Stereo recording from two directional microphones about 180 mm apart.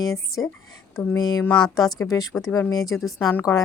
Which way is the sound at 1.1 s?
20° left (ahead or behind).